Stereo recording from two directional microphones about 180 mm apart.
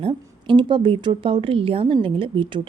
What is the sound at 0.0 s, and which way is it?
A woman's voice, 30° right (ahead or behind).